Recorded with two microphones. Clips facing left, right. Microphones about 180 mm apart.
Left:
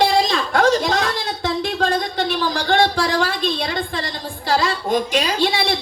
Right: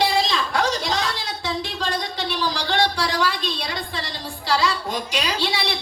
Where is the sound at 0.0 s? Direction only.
50° left (ahead or behind).